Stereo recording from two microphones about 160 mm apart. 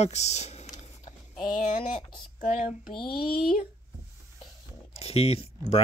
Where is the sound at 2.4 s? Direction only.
60° left (ahead or behind).